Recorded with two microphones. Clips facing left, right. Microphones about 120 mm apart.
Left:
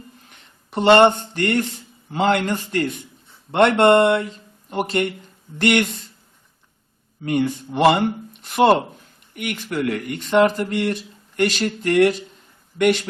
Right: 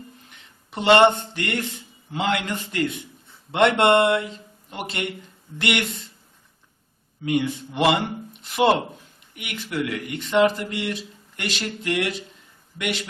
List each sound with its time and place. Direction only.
0.3 s speech: 45° left (ahead or behind)
7.3 s speech: 40° left (ahead or behind)